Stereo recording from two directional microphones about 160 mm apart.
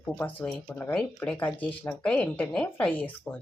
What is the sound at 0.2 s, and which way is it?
Speech, 10° left (ahead or behind).